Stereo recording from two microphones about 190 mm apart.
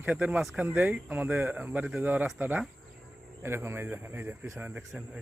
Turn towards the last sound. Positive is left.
turn(degrees=-5)  # may be behind; listen again after turning